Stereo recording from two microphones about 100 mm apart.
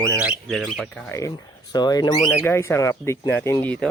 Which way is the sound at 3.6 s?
10° left (ahead or behind).